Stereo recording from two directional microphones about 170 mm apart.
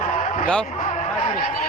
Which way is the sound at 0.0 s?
50° left (ahead or behind).